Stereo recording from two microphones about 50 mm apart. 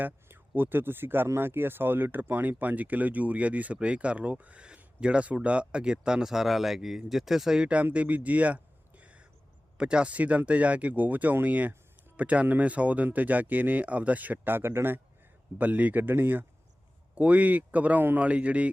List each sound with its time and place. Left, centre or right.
0.0 s speech: right; by 7.7 s centre
7.9 s a sound: right
9.7 s speech: centre; by 15.0 s right
15.5 s speech: right
17.2 s speech: right